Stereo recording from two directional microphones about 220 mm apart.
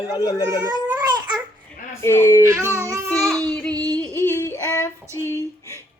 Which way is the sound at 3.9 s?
10° left (ahead or behind).